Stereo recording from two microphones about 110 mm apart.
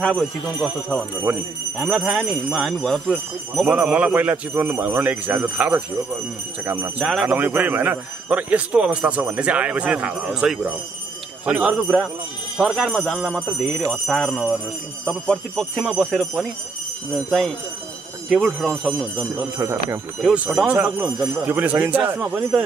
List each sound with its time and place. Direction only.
0.0 s speech: 5° left (ahead or behind)
1.3 s a man's voice: 15° right (ahead or behind)
1.8 s speech: 5° right (ahead or behind)
3.6 s a man's voice: 15° right (ahead or behind)
7.0 s speech: 5° right (ahead or behind)
7.2 s a man's voice: 15° right (ahead or behind)
11.7 s speech: 5° left (ahead or behind)
14.0 s jingle bell: 5° left (ahead or behind)
15.0 s speech: centre (ahead or behind)
18.3 s speech: centre (ahead or behind)
19.6 s speech: 25° right (ahead or behind)
20.2 s a man's voice: 10° right (ahead or behind)